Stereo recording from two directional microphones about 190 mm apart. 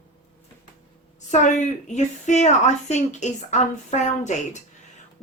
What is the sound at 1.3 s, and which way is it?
A woman's voice, 40° left (ahead or behind).